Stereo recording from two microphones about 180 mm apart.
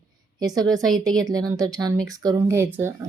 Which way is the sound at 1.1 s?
20° right (ahead or behind).